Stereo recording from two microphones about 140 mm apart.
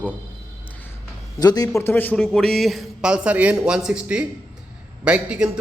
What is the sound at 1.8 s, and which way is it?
A man's voice, 15° left (ahead or behind).